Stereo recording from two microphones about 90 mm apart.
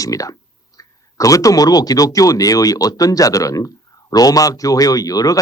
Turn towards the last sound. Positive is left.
turn(degrees=40)  # may be behind; listen again after turning